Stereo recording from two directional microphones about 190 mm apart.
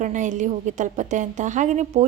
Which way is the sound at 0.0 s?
40° right (ahead or behind).